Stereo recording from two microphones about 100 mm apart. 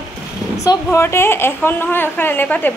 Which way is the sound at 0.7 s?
25° left (ahead or behind).